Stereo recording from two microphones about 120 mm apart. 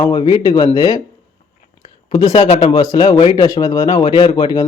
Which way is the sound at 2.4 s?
60° left (ahead or behind).